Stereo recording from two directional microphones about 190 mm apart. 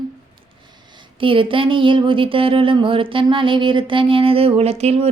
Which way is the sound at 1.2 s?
25° right (ahead or behind).